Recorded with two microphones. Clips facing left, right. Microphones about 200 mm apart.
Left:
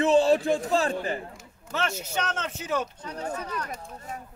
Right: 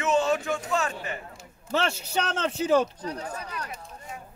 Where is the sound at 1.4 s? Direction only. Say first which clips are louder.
Right 3 dB; 30° right (ahead or behind).